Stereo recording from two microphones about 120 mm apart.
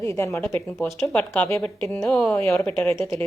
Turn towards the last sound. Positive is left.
turn(degrees=25)  # may be behind; listen again after turning